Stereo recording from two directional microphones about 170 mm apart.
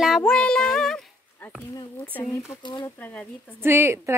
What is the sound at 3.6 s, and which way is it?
Speech, 15° right (ahead or behind).